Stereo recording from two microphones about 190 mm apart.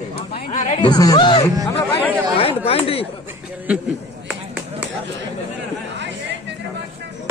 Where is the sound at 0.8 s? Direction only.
20° left (ahead or behind).